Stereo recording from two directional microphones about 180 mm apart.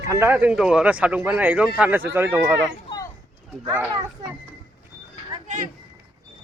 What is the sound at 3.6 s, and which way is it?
Speech, 15° right (ahead or behind).